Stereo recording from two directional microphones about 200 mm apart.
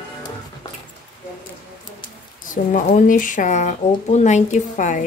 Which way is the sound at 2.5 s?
40° left (ahead or behind).